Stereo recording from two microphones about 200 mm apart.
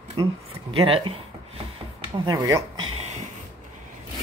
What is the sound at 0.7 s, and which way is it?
Speech, 25° right (ahead or behind).